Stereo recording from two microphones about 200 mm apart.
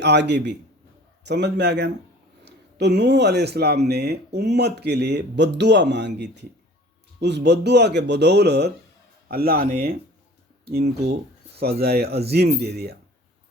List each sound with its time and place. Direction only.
0.0 s speech: 60° right (ahead or behind)